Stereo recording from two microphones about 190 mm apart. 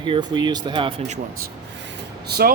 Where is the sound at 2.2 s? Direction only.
55° right (ahead or behind).